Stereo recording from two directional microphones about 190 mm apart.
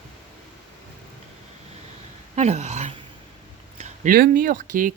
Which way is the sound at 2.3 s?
35° right (ahead or behind).